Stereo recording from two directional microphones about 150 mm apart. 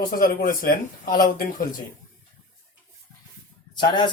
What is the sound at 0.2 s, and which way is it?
Speech, 75° left (ahead or behind).